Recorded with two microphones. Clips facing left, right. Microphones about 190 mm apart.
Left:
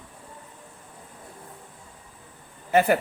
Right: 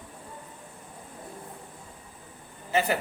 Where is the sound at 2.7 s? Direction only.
55° left (ahead or behind).